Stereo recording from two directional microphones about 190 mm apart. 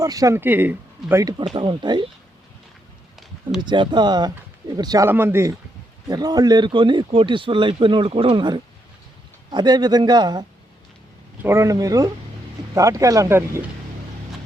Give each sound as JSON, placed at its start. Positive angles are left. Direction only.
{"t": 0.0, "sound": "a man's voice", "side_deg": -20}
{"t": 3.6, "sound": "a man's voice", "side_deg": -25}
{"t": 11.4, "sound": "speech", "side_deg": -15}